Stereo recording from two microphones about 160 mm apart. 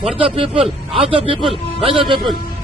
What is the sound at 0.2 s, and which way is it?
Speech, 35° right (ahead or behind).